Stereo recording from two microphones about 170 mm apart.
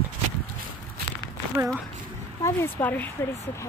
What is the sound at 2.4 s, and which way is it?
Speech, 10° left (ahead or behind).